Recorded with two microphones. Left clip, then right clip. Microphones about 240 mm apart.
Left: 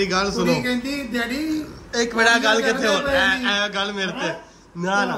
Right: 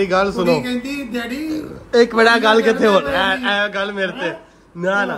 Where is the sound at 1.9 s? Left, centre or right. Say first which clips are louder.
Right 5 dB; centre.